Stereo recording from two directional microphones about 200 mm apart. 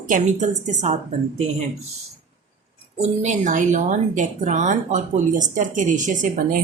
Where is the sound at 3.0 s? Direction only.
35° right (ahead or behind).